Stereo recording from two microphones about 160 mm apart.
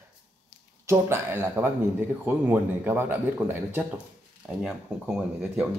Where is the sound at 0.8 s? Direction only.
15° right (ahead or behind).